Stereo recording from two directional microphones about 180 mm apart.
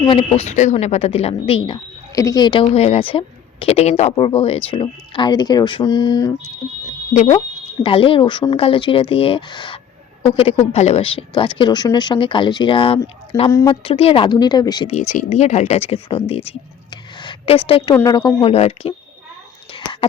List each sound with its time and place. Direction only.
0.0 s speech: 30° left (ahead or behind)
7.1 s speech: 40° left (ahead or behind)
7.8 s speech: 30° left (ahead or behind)
13.3 s speech: 15° left (ahead or behind)
13.7 s speech: 30° left (ahead or behind)
15.1 s speech: 40° left (ahead or behind)
17.9 s speech: 15° left (ahead or behind)
18.3 s speech: 35° left (ahead or behind)
19.7 s a sound: 25° left (ahead or behind)